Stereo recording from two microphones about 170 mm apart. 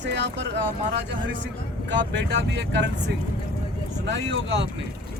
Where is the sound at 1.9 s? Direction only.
90° right.